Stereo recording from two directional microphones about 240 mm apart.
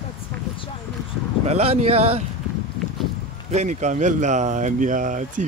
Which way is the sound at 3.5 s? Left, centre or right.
Right.